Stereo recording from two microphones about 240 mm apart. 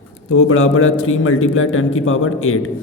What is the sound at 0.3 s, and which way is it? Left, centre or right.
A man's voice, left.